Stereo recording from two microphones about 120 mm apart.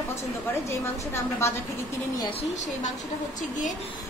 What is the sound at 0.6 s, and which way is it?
Speech, 20° left (ahead or behind).